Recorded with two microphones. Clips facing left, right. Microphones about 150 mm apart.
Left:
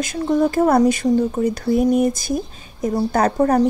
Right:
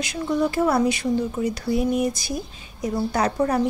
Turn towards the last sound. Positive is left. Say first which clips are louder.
# left 5 dB
turn(degrees=45)  # may be behind; listen again after turning